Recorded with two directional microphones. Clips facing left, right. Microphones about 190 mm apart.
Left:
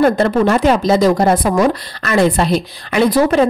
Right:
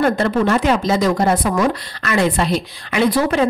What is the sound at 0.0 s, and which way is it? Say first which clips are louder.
Speech: left 4 dB; 35° left (ahead or behind).